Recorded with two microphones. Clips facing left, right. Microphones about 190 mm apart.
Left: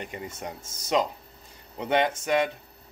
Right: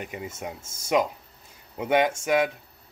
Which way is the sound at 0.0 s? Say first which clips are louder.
Right 1 dB; 5° right (ahead or behind).